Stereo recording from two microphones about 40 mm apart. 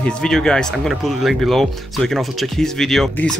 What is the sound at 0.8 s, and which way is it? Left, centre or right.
Speech, centre.